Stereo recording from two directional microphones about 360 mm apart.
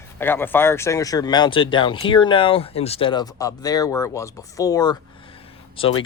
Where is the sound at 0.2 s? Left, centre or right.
Centre.